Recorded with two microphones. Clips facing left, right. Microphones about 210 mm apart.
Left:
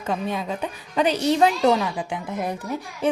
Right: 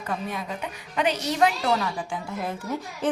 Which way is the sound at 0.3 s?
30° left (ahead or behind).